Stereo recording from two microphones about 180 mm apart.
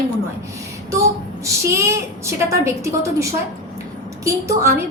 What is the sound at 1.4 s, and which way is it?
A woman's voice, 15° right (ahead or behind).